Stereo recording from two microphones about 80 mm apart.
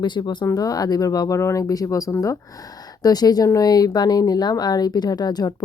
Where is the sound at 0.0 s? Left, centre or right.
Left.